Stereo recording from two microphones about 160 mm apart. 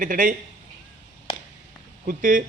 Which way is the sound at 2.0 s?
60° right (ahead or behind).